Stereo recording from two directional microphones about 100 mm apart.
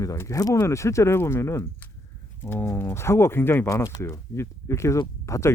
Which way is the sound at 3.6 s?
35° left (ahead or behind).